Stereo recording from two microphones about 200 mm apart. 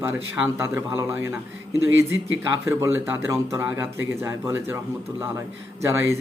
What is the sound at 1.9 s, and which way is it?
Speech, 70° right (ahead or behind).